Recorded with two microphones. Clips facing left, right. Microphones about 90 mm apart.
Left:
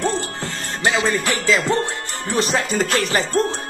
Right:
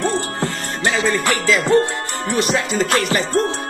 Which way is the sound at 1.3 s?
25° left (ahead or behind).